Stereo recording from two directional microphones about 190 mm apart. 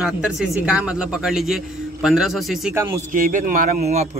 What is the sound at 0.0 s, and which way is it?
Speech, 5° right (ahead or behind).